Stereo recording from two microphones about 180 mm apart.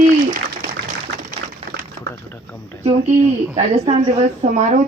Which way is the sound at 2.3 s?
10° left (ahead or behind).